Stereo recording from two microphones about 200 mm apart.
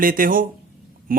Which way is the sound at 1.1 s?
45° right (ahead or behind).